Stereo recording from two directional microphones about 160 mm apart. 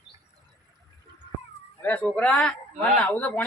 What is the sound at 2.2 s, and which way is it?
Speech, 5° left (ahead or behind).